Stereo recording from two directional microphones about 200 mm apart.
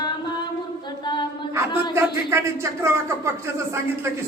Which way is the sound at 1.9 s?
15° right (ahead or behind).